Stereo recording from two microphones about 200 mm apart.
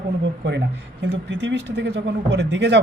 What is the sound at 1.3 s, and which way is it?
Speech, 65° right (ahead or behind).